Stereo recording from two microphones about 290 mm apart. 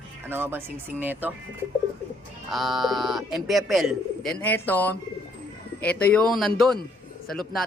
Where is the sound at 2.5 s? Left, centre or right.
Centre.